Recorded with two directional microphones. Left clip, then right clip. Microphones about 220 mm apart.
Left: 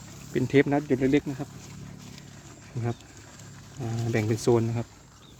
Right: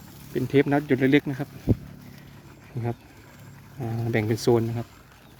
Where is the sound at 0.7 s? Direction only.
20° right (ahead or behind).